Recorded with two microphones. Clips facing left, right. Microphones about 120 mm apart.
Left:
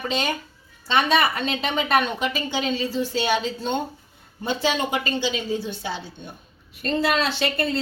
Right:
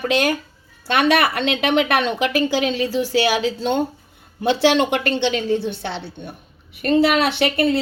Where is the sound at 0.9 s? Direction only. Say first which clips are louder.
Right 3 dB; 80° right.